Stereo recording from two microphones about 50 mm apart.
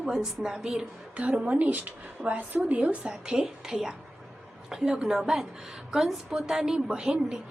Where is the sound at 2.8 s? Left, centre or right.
Right.